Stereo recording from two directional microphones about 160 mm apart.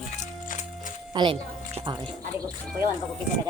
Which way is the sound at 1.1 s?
35° right (ahead or behind).